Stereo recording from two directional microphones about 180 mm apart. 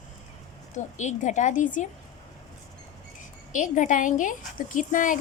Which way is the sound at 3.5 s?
45° left (ahead or behind).